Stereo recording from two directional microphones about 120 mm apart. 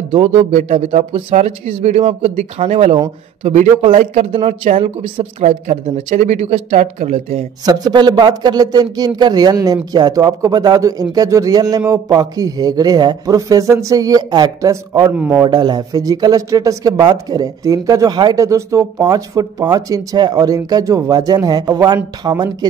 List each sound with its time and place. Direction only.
0.1 s speech: 55° right (ahead or behind)
1.3 s speech: 70° right (ahead or behind); by 4.6 s 50° right (ahead or behind)
4.6 s speech: 65° right (ahead or behind)
5.0 s speech: 45° right (ahead or behind)
5.4 s speech: 75° right (ahead or behind)
7.6 s speech: 35° right (ahead or behind)
15.1 s a man's voice: 15° right (ahead or behind)
15.4 s speech: 35° right (ahead or behind)